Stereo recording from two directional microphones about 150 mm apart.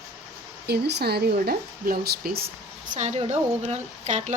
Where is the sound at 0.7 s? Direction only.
90° right.